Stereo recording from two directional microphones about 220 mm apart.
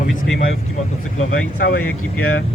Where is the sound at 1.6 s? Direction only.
40° left (ahead or behind).